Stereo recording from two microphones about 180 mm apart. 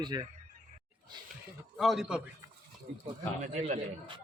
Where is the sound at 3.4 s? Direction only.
45° right (ahead or behind).